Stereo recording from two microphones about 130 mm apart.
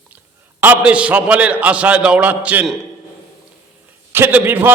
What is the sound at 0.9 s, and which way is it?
A man's voice, 10° right (ahead or behind).